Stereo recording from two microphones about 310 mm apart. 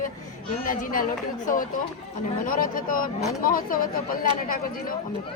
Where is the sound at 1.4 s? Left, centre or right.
Left.